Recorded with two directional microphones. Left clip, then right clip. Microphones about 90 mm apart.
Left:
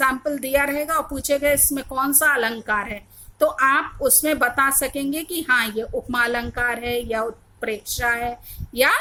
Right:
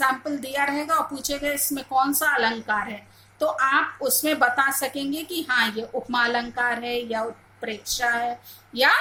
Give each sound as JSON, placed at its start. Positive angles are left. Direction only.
{"t": 0.0, "sound": "a woman's voice", "side_deg": 35}